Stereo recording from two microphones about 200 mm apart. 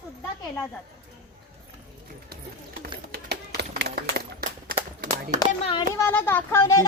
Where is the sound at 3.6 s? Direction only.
55° right (ahead or behind).